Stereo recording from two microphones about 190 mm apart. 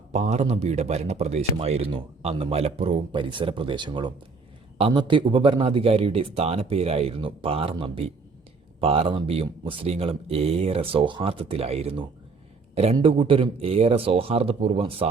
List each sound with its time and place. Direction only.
0.1 s a man's voice: 35° right (ahead or behind)